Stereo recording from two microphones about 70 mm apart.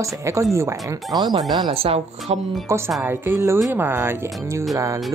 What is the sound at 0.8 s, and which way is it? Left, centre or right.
Speech, right.